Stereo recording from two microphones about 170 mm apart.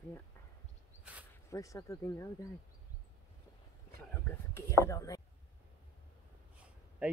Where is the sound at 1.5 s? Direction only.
20° left (ahead or behind).